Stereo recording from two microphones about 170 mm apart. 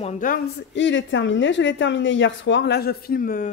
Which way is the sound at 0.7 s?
90° left.